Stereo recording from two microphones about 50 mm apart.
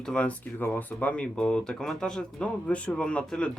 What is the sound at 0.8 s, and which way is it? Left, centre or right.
Speech, left.